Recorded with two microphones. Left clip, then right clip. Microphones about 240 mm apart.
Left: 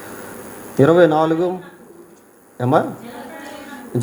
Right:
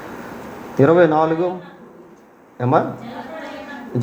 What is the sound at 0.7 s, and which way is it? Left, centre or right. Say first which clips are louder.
Speech: left 1 dB; left.